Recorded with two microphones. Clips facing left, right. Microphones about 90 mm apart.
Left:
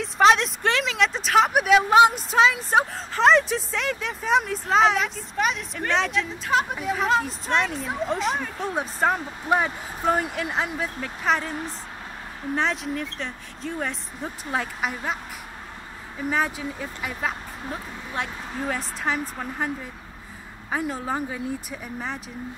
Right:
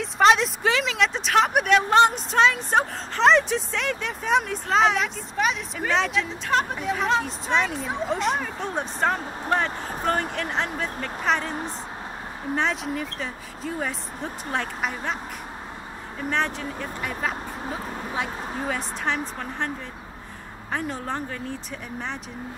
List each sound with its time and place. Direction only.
0.0 s speech: centre (ahead or behind)
12.5 s speech: centre (ahead or behind)
16.2 s speech: 5° left (ahead or behind)
20.7 s speech: 5° left (ahead or behind)